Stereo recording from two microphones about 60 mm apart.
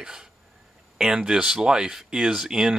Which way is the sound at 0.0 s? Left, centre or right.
Centre.